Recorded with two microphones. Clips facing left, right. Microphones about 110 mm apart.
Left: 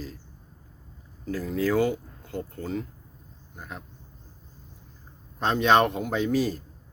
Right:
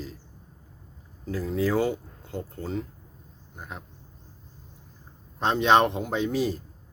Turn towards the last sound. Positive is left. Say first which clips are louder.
# left 1 dB
turn(degrees=-25)  # may be behind; listen again after turning